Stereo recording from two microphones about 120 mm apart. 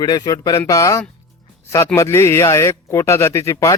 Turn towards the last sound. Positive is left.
turn(degrees=30)  # may be behind; listen again after turning